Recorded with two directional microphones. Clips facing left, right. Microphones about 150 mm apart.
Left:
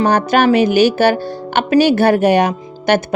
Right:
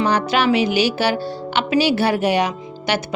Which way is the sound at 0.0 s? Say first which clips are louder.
Left 5 dB; 50° left (ahead or behind).